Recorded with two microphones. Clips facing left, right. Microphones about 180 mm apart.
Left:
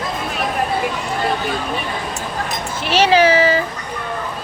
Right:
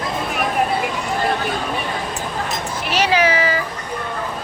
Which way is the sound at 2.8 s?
30° left (ahead or behind).